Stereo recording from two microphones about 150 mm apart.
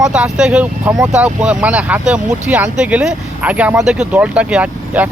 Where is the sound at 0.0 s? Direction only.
5° right (ahead or behind).